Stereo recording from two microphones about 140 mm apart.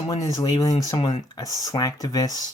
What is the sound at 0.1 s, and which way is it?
Speech, 25° left (ahead or behind).